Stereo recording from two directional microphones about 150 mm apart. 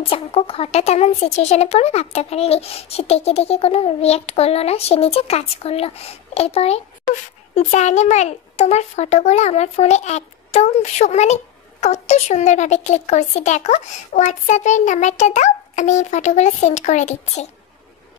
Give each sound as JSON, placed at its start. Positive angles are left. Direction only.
{"t": 0.0, "sound": "speech", "side_deg": 40}